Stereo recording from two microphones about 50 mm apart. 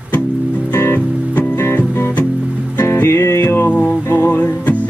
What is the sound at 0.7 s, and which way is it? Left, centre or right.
Music, left.